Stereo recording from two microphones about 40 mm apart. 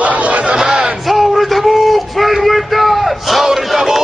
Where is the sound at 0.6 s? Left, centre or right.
Centre.